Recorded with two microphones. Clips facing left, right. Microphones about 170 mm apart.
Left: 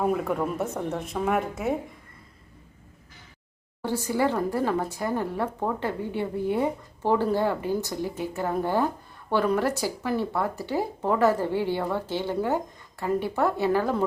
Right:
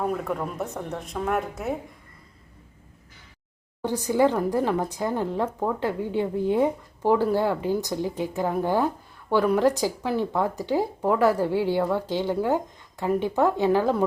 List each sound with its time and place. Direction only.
0.0 s a woman's voice: 5° left (ahead or behind)
3.8 s speech: 15° right (ahead or behind)